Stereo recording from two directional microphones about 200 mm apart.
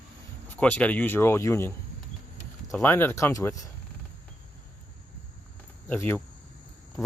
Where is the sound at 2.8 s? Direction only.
10° left (ahead or behind).